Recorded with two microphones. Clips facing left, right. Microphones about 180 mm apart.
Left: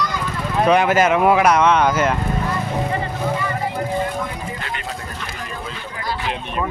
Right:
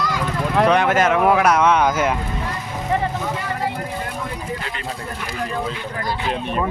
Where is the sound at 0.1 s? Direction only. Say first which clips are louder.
Right 3 dB; 80° right.